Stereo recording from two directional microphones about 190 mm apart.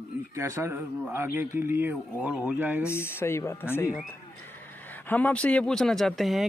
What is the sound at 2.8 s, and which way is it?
Speech, 15° left (ahead or behind).